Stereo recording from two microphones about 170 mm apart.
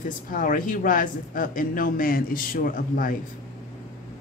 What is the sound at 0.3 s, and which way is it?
Speech, 55° left (ahead or behind).